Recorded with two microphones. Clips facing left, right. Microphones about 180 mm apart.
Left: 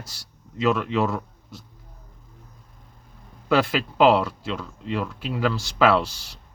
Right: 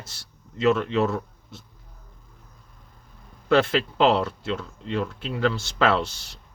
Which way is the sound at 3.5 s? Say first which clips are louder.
Right 1 dB; 10° left (ahead or behind).